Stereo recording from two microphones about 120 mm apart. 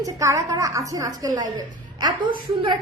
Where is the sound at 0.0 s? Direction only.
25° right (ahead or behind).